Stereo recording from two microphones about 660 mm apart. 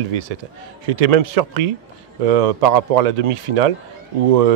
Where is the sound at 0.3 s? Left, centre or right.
Right.